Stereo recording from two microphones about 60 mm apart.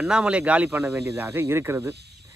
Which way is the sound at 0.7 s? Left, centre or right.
Right.